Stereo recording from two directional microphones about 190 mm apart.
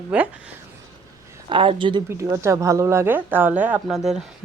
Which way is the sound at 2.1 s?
15° right (ahead or behind).